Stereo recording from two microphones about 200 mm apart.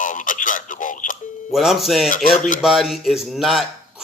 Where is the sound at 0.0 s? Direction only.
40° left (ahead or behind).